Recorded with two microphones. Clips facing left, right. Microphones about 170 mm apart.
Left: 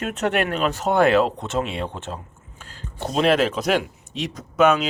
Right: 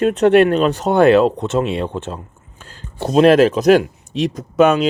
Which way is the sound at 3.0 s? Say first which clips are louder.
Right 8 dB; 45° right (ahead or behind).